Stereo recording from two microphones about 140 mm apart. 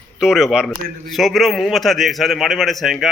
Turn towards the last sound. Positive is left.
turn(degrees=0)  # may be behind; listen again after turning